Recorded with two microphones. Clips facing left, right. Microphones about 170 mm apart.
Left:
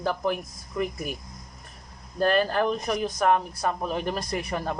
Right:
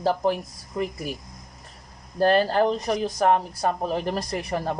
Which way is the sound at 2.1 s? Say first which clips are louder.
Right 3 dB; 30° right (ahead or behind).